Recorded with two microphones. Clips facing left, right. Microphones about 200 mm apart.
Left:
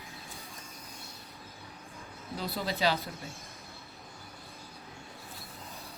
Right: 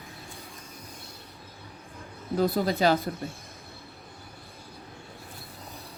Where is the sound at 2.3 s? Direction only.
50° right (ahead or behind).